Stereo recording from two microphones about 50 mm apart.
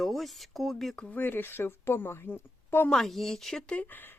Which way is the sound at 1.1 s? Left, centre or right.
Left.